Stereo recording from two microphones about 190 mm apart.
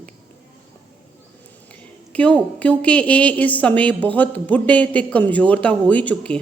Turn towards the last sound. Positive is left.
turn(degrees=5)  # may be behind; listen again after turning